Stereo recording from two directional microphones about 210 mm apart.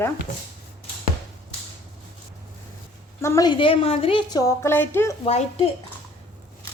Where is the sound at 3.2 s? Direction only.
15° left (ahead or behind).